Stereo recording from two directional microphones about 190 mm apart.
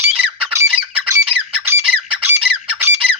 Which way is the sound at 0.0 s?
10° right (ahead or behind).